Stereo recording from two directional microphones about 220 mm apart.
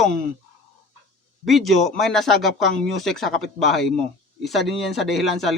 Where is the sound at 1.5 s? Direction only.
Centre (ahead or behind).